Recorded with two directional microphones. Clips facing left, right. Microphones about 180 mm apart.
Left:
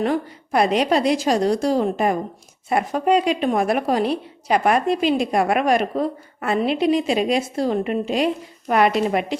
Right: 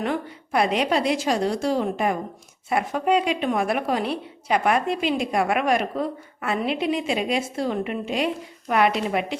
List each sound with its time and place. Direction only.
0.0 s a woman's voice: 40° left (ahead or behind)